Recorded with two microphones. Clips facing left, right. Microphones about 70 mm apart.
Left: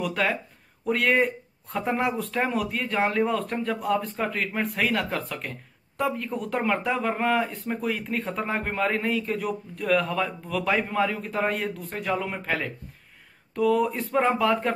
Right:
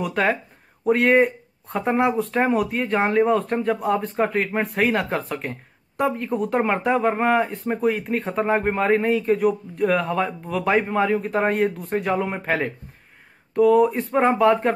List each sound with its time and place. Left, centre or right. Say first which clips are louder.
0.0 s speech: right 4 dB; right